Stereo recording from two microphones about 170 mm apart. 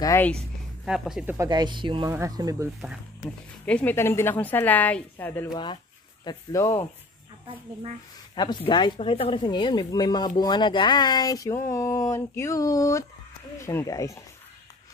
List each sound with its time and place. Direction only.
0.0 s a woman's voice: 15° left (ahead or behind)
0.8 s speech: centre (ahead or behind)
1.5 s speech: 25° right (ahead or behind)
3.6 s a woman's voice: 10° left (ahead or behind)
8.4 s a woman's voice: 25° left (ahead or behind)